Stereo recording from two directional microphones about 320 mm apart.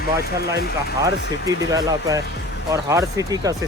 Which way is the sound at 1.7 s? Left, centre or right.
Centre.